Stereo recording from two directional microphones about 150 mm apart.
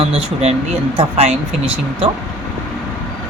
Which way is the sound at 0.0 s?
45° right (ahead or behind).